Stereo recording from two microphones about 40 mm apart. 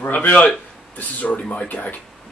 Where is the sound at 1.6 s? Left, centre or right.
Left.